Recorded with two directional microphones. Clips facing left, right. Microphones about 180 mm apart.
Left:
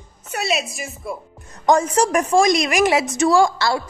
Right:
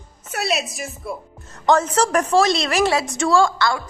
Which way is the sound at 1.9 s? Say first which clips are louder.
Left 1 dB; 10° left (ahead or behind).